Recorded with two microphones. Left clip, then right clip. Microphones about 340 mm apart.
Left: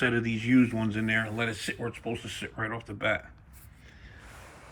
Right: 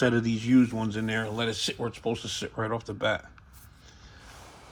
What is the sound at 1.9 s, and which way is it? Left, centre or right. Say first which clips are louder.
Speech: right 4 dB; right.